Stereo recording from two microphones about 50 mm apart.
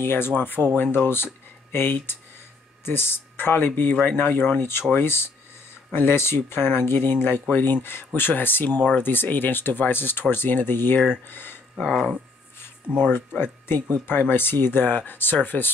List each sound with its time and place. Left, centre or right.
0.0 s speech: left
13.1 s speech: left